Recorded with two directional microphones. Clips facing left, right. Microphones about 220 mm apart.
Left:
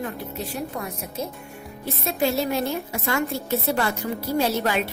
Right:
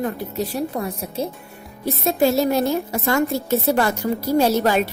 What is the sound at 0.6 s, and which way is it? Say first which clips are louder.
A woman's voice: right 6 dB; 35° right (ahead or behind).